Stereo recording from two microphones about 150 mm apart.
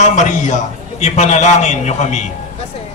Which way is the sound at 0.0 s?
55° left (ahead or behind).